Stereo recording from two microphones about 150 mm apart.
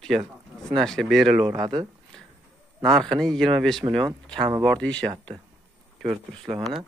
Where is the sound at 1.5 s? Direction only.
25° right (ahead or behind).